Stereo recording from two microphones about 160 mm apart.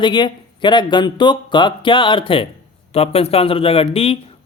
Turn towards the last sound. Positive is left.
turn(degrees=35)  # may be behind; listen again after turning